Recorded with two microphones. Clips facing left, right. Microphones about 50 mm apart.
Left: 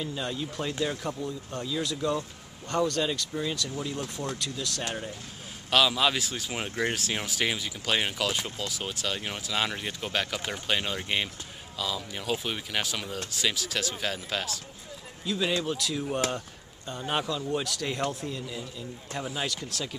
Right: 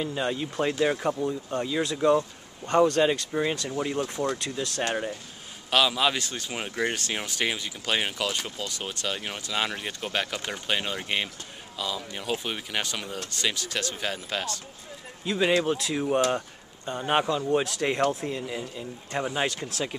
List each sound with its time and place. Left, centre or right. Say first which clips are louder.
0.0 s speech: right 4 dB; right
5.7 s speech: right 1 dB; centre
15.2 s speech: right 5 dB; right